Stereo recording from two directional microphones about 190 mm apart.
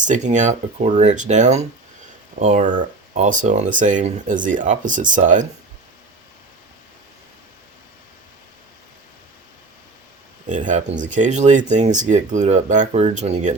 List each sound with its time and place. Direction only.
0.0 s speech: 40° right (ahead or behind)
10.5 s speech: 40° right (ahead or behind)